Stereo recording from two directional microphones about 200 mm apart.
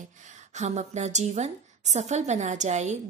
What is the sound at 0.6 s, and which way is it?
A woman's voice, 35° right (ahead or behind).